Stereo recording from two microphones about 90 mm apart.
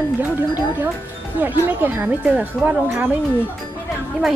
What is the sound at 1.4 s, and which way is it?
Speech, 20° right (ahead or behind).